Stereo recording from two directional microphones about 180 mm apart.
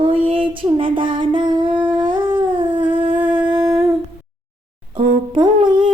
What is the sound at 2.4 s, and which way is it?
Dog, 25° right (ahead or behind).